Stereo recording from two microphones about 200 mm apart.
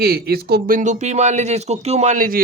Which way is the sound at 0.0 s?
50° right (ahead or behind).